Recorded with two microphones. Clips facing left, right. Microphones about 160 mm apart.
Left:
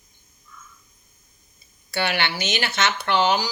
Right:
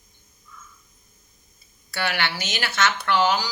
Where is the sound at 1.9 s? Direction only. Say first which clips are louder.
Left 2 dB; 25° left (ahead or behind).